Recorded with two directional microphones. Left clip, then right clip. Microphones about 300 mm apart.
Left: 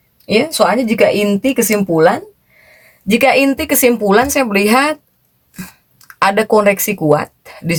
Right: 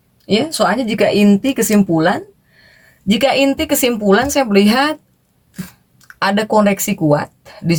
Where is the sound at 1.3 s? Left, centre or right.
Centre.